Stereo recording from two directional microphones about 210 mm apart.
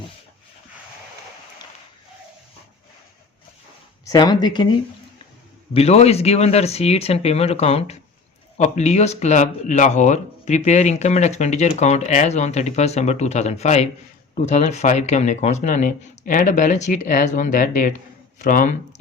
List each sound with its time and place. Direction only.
4.1 s speech: 20° left (ahead or behind)
5.7 s speech: 30° left (ahead or behind)